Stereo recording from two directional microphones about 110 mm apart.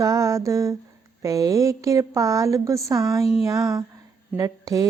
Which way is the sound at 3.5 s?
30° right (ahead or behind).